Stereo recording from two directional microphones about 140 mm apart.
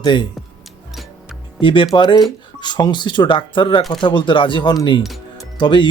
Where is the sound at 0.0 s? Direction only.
35° left (ahead or behind).